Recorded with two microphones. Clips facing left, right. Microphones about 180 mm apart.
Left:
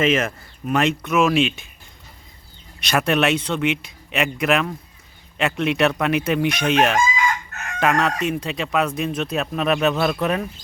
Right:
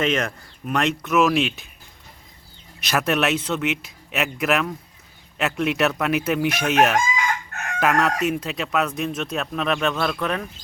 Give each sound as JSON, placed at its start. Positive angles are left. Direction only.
{"t": 0.0, "sound": "speech", "side_deg": 5}
{"t": 2.8, "sound": "speech", "side_deg": 0}